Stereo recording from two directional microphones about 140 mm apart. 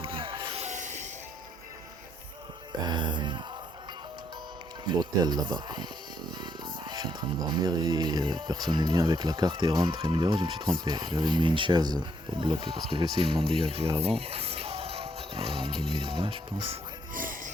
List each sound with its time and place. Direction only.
0.0 s music: 40° right (ahead or behind)
0.6 s music: 60° right (ahead or behind)
2.8 s music: 35° right (ahead or behind)
4.9 s speech: 30° right (ahead or behind)
17.2 s music: 75° right (ahead or behind)